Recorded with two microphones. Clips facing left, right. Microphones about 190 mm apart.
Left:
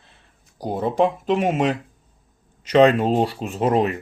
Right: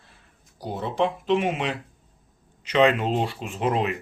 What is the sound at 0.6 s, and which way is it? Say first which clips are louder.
A man's voice: left 5 dB; 45° left (ahead or behind).